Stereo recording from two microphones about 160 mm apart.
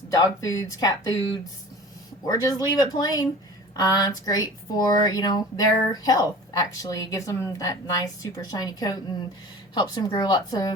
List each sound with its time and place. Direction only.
0.1 s speech: 20° left (ahead or behind)
2.2 s speech: 25° left (ahead or behind)